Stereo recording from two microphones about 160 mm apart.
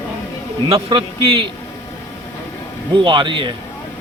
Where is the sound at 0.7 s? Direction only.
35° right (ahead or behind).